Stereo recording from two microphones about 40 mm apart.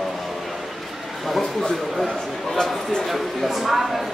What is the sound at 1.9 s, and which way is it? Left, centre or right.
Speech, centre.